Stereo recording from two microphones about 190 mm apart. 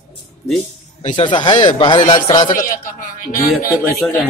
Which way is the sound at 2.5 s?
45° left (ahead or behind).